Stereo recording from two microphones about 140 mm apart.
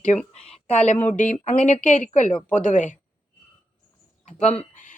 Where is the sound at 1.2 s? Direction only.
60° left (ahead or behind).